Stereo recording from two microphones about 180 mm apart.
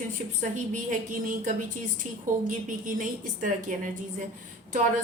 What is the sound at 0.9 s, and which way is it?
A woman's voice, 50° right (ahead or behind).